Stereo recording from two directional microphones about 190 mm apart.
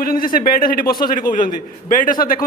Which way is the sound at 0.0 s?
50° left (ahead or behind).